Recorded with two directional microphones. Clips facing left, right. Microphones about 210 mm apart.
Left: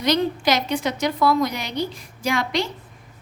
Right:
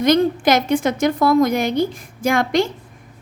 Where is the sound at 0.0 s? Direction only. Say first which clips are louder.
Right 6 dB; 50° right (ahead or behind).